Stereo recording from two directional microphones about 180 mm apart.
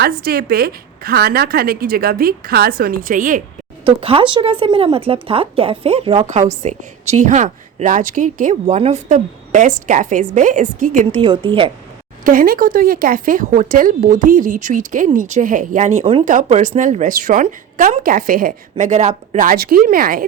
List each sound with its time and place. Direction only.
0.0 s a woman's voice: 60° right (ahead or behind)
4.0 s speech: 30° right (ahead or behind); by 11.2 s 45° right (ahead or behind)
11.2 s a woman's voice: 30° right (ahead or behind)
12.2 s a woman's voice: 50° right (ahead or behind)